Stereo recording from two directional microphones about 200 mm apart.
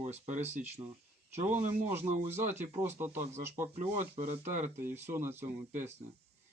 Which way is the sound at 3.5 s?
35° right (ahead or behind).